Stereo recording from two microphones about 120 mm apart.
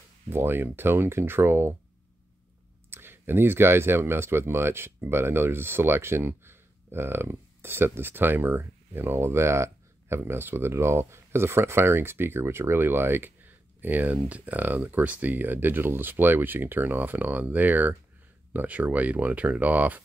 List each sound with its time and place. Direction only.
0.3 s speech: 20° right (ahead or behind)
2.9 s speech: 20° right (ahead or behind)